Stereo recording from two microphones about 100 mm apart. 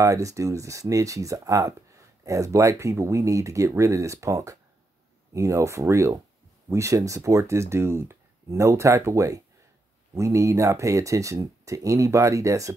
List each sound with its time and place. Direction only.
0.0 s speech: 35° right (ahead or behind)